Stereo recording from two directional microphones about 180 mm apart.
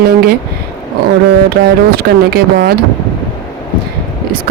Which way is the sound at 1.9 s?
60° right (ahead or behind).